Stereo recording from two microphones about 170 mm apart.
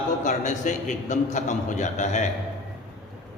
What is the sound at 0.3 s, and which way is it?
A man's voice, 45° left (ahead or behind).